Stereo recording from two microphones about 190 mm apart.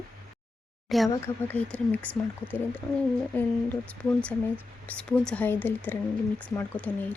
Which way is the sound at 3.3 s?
10° left (ahead or behind).